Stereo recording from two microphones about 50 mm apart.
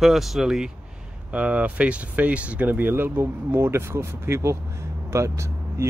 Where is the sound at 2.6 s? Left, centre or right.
Right.